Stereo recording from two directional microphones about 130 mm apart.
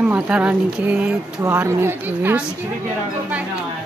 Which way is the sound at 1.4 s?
20° right (ahead or behind).